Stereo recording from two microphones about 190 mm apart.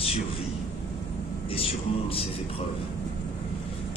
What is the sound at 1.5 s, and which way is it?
Speech, 30° left (ahead or behind).